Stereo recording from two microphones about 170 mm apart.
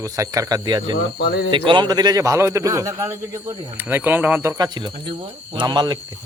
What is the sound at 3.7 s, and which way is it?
Speech, 10° right (ahead or behind).